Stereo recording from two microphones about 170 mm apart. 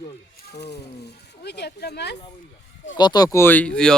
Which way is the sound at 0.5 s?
80° left.